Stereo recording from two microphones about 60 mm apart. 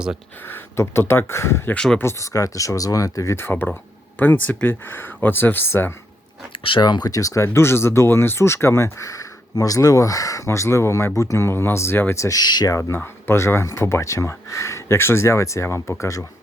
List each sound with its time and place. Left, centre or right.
0.4 s speech: left
1.7 s speech: centre
2.0 s speech: left
3.3 s speech: left
7.0 s speech: left
7.4 s speech: left
12.1 s speech: left
12.9 s speech: left